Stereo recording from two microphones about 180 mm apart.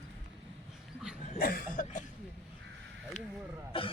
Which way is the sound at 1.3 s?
55° left (ahead or behind).